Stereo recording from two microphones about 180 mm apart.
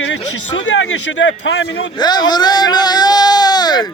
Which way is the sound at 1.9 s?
25° left (ahead or behind).